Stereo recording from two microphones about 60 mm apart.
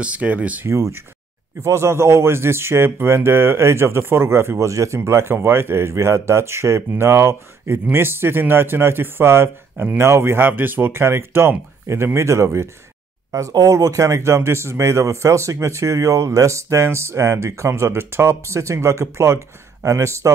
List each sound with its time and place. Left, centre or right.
0.0 s speech: right
1.6 s a man's voice: right
4.6 s a man's voice: right
13.3 s speech: right